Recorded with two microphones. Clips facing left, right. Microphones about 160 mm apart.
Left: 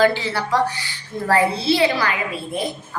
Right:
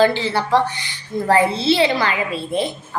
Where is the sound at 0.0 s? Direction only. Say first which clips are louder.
Right 2 dB; 30° right (ahead or behind).